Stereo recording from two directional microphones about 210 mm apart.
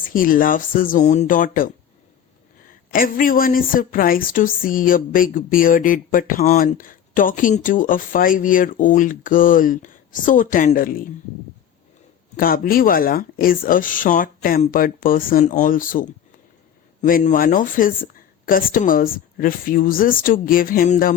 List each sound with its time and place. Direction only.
0.0 s a woman's voice: 40° left (ahead or behind)
12.4 s a woman's voice: 45° left (ahead or behind)